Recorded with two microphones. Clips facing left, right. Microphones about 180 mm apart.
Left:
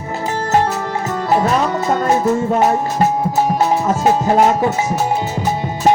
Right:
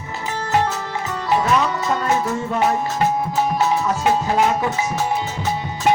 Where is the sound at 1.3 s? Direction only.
40° left (ahead or behind).